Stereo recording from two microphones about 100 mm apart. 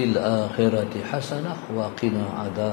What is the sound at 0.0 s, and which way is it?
A man's voice, 20° left (ahead or behind).